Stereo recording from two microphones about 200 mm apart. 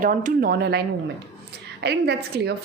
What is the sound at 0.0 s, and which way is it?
A woman's voice, 40° right (ahead or behind).